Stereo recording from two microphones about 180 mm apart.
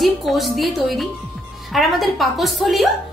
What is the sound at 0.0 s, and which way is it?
A woman's voice, centre (ahead or behind).